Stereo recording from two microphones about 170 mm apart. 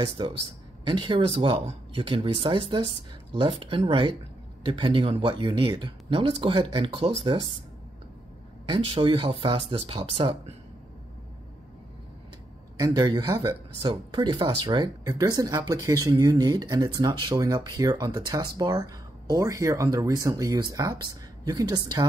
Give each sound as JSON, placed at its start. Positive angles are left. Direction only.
{"t": 0.2, "sound": "speech", "side_deg": -25}
{"t": 3.3, "sound": "speech", "side_deg": -30}
{"t": 8.6, "sound": "speech", "side_deg": -30}
{"t": 12.7, "sound": "speech", "side_deg": -25}